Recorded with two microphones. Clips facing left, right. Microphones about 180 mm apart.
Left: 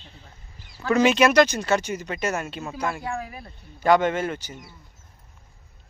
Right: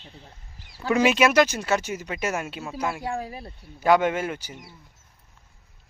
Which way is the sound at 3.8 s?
5° right (ahead or behind).